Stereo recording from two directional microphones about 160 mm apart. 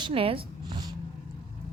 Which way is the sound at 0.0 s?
35° right (ahead or behind).